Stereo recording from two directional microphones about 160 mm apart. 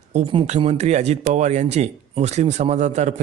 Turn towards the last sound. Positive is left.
turn(degrees=-45)  # may be behind; listen again after turning